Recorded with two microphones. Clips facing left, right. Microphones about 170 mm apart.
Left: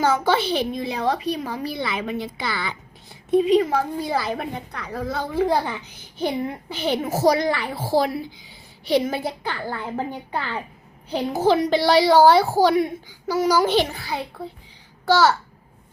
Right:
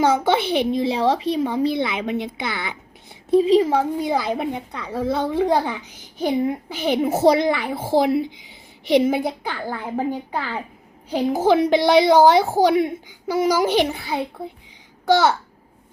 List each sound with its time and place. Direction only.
0.0 s a woman's voice: 20° right (ahead or behind)
3.2 s a woman's voice: 30° right (ahead or behind)